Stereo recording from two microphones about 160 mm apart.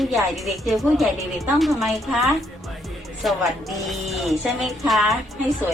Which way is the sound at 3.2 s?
Centre (ahead or behind).